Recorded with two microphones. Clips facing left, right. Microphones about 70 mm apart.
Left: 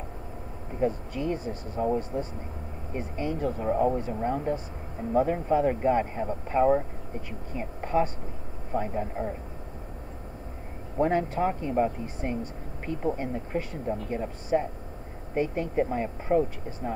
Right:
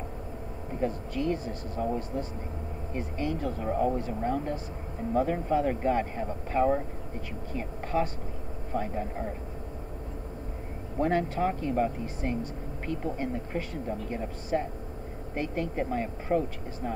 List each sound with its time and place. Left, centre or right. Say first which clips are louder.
0.8 s speech: left 1 dB; centre
3.2 s speech: left 2 dB; centre
11.0 s speech: left 2 dB; centre